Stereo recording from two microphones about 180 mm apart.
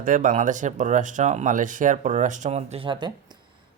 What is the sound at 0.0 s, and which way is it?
Speech, 45° right (ahead or behind).